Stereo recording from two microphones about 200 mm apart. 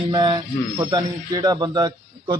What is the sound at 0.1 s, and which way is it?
A man's voice, 20° right (ahead or behind).